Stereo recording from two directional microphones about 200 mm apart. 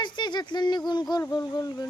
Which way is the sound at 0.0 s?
20° left (ahead or behind).